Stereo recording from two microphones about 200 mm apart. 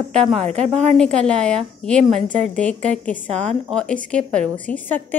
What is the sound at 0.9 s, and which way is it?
A woman's voice, 5° left (ahead or behind).